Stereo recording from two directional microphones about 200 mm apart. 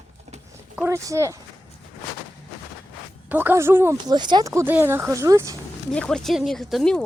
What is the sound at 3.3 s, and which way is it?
Speech, 10° right (ahead or behind).